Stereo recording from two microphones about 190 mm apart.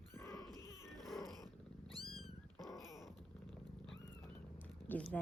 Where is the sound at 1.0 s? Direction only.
Centre (ahead or behind).